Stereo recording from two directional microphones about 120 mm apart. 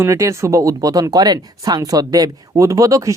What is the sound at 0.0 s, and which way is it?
Speech, 25° right (ahead or behind).